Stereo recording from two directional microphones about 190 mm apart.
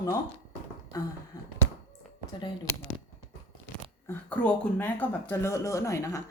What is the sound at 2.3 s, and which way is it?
Speech, 20° left (ahead or behind).